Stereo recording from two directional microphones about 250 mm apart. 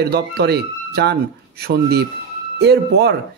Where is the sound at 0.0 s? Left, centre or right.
Right.